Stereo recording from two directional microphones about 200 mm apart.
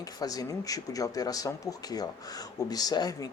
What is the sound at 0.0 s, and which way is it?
Speech, 20° left (ahead or behind).